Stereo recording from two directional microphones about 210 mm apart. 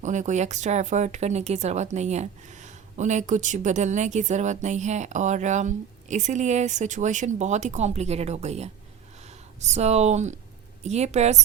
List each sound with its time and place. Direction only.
0.0 s speech: 35° right (ahead or behind)